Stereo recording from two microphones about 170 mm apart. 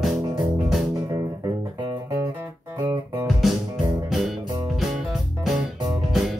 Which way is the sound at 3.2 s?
Centre (ahead or behind).